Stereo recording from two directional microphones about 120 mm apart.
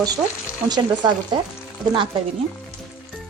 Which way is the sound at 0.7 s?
35° right (ahead or behind).